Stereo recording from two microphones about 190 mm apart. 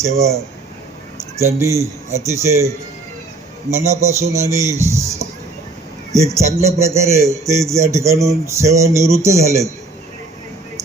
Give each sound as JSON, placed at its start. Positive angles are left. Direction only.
{"t": 0.0, "sound": "speech", "side_deg": -15}
{"t": 3.7, "sound": "speech", "side_deg": -15}